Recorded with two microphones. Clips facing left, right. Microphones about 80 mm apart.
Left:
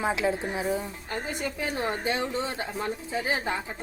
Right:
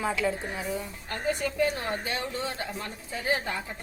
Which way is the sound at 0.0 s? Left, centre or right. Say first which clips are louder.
Left 2 dB; left.